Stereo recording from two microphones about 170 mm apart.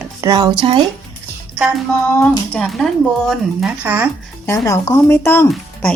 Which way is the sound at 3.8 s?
10° right (ahead or behind).